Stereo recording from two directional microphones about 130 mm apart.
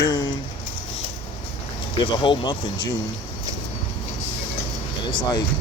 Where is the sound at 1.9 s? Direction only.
40° left (ahead or behind).